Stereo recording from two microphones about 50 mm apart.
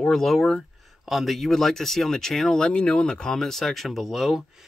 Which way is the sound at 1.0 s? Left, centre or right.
Centre.